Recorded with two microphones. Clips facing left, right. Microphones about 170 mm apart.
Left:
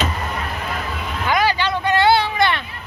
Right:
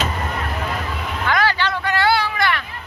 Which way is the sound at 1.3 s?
15° left (ahead or behind).